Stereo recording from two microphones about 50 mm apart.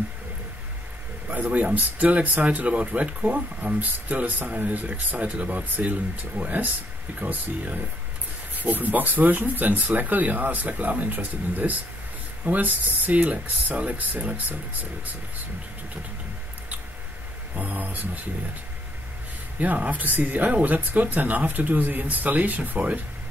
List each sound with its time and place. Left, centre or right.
1.3 s speech: right
17.6 s speech: right
19.6 s speech: right